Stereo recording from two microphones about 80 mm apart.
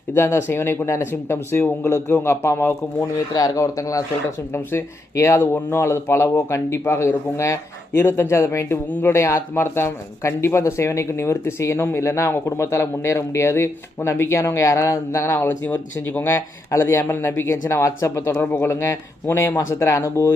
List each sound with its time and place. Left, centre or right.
0.1 s speech: left
3.3 s speech: left
4.5 s speech: left